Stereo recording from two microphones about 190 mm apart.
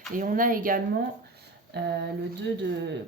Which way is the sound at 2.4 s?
65° right (ahead or behind).